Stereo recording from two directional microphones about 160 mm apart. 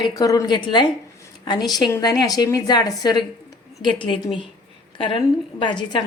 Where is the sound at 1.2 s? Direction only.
25° left (ahead or behind).